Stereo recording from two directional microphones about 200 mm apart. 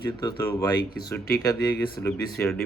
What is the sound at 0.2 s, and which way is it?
Speech, 15° left (ahead or behind).